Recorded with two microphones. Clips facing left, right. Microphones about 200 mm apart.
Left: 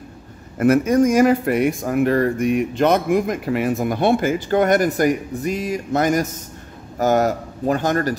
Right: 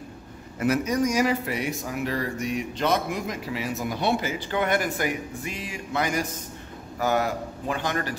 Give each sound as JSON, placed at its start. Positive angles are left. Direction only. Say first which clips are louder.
{"t": 0.6, "sound": "speech", "louder": "left 8 dB", "side_deg": 50}